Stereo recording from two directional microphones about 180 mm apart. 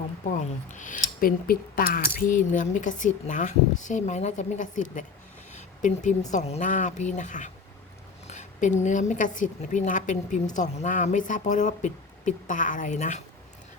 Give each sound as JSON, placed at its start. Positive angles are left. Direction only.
{"t": 0.3, "sound": "speech", "side_deg": 45}